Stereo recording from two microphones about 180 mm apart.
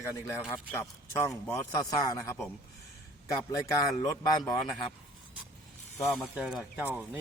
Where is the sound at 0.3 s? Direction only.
15° left (ahead or behind).